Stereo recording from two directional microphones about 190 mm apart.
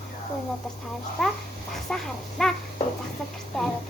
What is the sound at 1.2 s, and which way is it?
A child's voice, centre (ahead or behind).